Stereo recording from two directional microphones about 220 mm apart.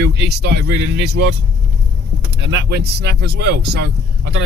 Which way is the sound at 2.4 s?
55° right (ahead or behind).